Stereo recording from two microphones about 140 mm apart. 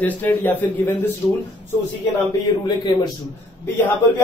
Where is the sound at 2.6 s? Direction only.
30° left (ahead or behind).